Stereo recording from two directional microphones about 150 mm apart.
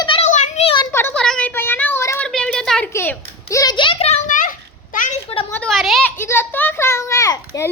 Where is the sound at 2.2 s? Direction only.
5° left (ahead or behind).